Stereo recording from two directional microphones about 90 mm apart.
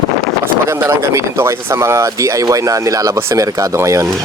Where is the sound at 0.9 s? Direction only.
30° right (ahead or behind).